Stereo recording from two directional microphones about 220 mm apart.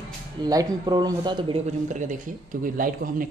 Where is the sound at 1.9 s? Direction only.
35° right (ahead or behind).